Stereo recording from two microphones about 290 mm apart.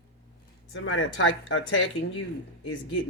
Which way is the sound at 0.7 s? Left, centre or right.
Left.